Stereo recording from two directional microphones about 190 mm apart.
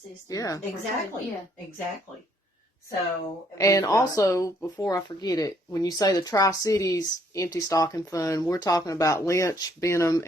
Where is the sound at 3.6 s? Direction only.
15° left (ahead or behind).